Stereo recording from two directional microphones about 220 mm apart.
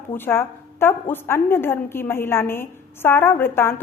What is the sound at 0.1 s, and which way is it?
A woman's voice, 10° left (ahead or behind).